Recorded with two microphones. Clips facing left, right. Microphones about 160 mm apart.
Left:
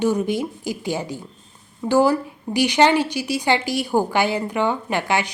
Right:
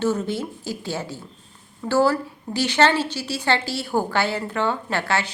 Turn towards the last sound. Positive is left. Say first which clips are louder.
# left 2 dB
turn(degrees=15)  # may be behind; listen again after turning